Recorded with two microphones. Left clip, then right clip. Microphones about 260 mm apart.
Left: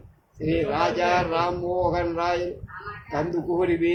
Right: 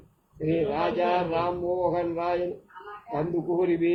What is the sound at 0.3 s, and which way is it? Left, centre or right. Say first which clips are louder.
Speech: left 2 dB; left.